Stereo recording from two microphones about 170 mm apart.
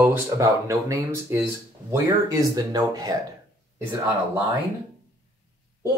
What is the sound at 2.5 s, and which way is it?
Speech, 20° right (ahead or behind).